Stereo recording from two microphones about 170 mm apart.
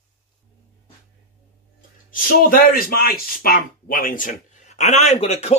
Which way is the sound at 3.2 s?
60° left (ahead or behind).